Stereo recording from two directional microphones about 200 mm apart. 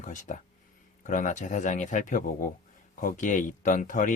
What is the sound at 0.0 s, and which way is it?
Speech, 40° left (ahead or behind).